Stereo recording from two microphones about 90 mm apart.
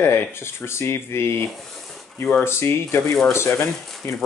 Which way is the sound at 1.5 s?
Centre (ahead or behind).